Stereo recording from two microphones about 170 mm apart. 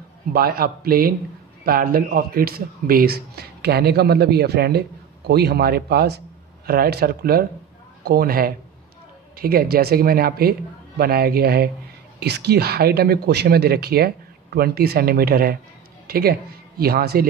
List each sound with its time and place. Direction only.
0.3 s speech: 65° right (ahead or behind)